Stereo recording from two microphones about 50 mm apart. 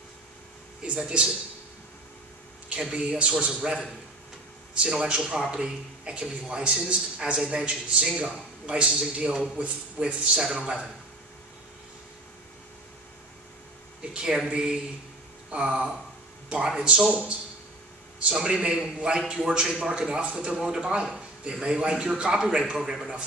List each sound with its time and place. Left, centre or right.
0.8 s speech: right
2.7 s a man's voice: centre
14.5 s a man's voice: centre
18.3 s a man's voice: centre